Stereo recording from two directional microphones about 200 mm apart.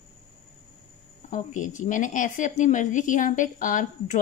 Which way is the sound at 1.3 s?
40° left (ahead or behind).